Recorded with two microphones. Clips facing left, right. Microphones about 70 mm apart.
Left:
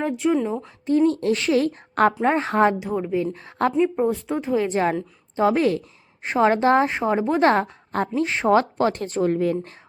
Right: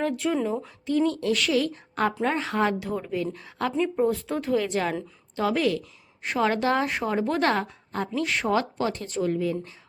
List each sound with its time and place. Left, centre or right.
0.0 s speech: centre
0.9 s a woman's voice: left
2.8 s a woman's voice: centre
3.3 s a woman's voice: left
3.7 s a woman's voice: centre
7.5 s a woman's voice: left
8.1 s a woman's voice: left
8.4 s a woman's voice: left